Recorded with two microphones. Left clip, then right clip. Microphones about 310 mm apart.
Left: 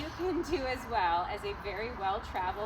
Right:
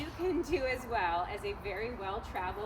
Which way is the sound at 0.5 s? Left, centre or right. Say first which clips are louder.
Even; centre.